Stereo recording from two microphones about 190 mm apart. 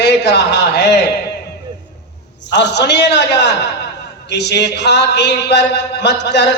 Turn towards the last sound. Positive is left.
turn(degrees=65)  # may be behind; listen again after turning